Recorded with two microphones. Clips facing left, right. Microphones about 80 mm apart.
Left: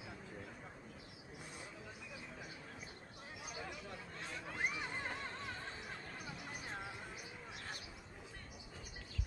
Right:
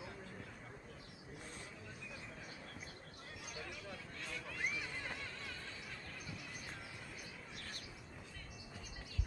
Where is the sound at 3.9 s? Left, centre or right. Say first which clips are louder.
Left 1 dB; left.